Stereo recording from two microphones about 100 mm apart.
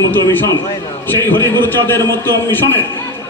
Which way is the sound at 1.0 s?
20° left (ahead or behind).